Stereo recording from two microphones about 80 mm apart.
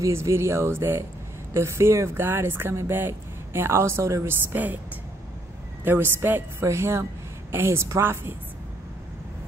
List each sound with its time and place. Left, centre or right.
0.0 s speech: right
5.9 s a woman's voice: right